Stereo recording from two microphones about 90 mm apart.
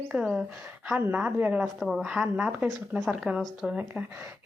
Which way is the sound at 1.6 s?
Centre (ahead or behind).